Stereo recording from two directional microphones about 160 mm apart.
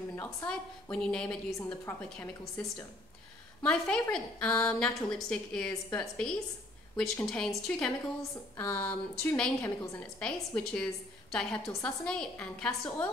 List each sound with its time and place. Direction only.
0.1 s a woman's voice: 15° left (ahead or behind)
0.5 s a woman's voice: 5° left (ahead or behind)
3.6 s a woman's voice: 5° left (ahead or behind)